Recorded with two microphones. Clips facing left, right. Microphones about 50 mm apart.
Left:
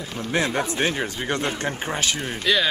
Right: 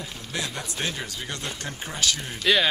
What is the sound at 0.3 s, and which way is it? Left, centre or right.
Speech, left.